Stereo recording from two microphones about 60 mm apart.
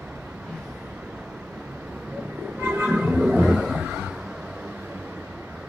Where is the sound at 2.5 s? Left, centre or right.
Right.